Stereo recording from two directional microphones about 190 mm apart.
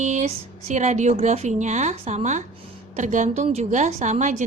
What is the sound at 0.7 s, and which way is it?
A woman's voice, 40° right (ahead or behind).